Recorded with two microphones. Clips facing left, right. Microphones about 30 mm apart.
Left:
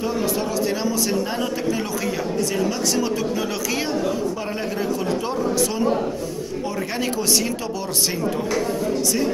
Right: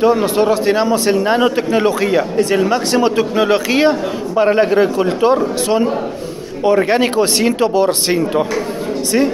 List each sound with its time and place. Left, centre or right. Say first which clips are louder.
0.0 s a man's voice: right 10 dB; right